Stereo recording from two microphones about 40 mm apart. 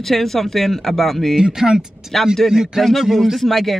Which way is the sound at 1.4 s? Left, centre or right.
Centre.